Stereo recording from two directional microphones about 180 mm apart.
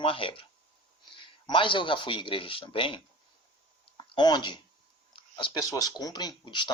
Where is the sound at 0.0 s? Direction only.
30° left (ahead or behind).